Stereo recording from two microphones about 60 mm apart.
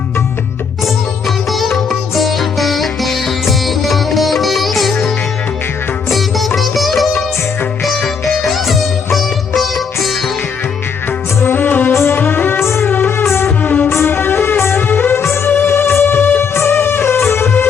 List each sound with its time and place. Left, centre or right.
1.5 s music: centre
6.1 s sitar: centre
8.4 s music: centre
9.6 s sitar: centre
11.3 s music: left
12.6 s music: left
12.9 s music: left
13.6 s music: left
13.8 s music: left
15.2 s music: left